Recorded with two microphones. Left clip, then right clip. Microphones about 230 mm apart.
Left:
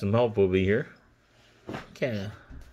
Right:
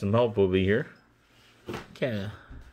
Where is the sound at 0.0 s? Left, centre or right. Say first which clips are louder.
Even; centre.